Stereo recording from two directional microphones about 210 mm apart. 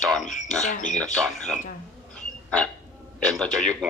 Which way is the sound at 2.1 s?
5° left (ahead or behind).